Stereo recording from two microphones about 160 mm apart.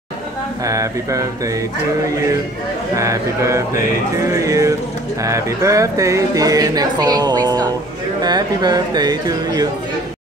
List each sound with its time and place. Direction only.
0.7 s speech: 20° right (ahead or behind)
3.0 s speech: 20° right (ahead or behind)